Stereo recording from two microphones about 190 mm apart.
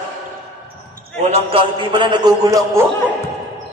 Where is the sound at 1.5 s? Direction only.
25° right (ahead or behind).